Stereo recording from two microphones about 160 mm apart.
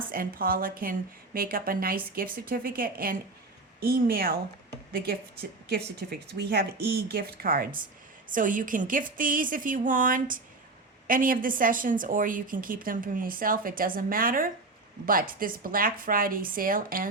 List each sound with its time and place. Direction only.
0.1 s a woman's voice: 65° right (ahead or behind)